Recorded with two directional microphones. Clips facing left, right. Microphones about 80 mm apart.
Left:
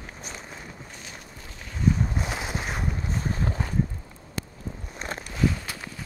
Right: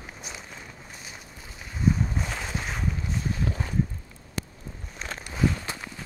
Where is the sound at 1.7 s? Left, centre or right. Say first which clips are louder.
Left 1 dB; centre.